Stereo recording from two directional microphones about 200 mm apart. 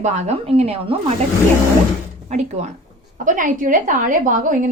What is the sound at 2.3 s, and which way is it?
A woman's voice, 35° right (ahead or behind).